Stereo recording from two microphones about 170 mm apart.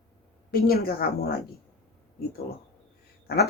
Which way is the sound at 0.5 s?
65° left (ahead or behind).